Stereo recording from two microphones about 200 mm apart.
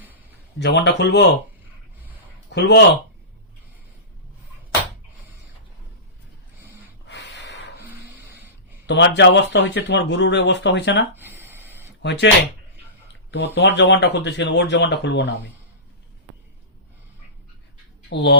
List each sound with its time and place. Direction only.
0.6 s speech: 60° left (ahead or behind)
2.5 s speech: 60° left (ahead or behind)
8.9 s speech: 60° left (ahead or behind)
11.1 s a sound: 10° right (ahead or behind)
12.0 s speech: 60° left (ahead or behind)
13.3 s speech: 60° left (ahead or behind)
18.1 s speech: 60° left (ahead or behind)